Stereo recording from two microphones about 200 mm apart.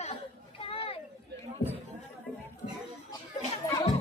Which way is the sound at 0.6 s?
25° left (ahead or behind).